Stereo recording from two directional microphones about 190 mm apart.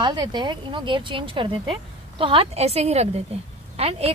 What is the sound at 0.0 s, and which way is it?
A woman's voice, 25° right (ahead or behind).